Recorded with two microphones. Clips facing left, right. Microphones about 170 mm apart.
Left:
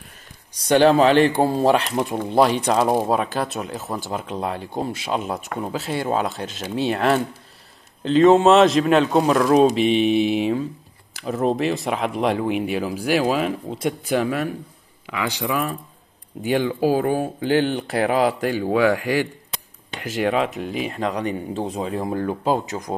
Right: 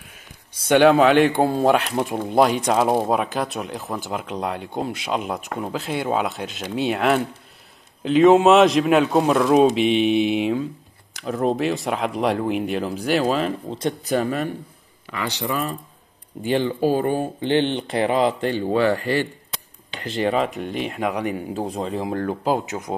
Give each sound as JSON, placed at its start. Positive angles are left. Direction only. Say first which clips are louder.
{"t": 0.8, "sound": "speech", "louder": "even", "side_deg": 0}
{"t": 22.9, "sound": "speech", "louder": "even", "side_deg": -15}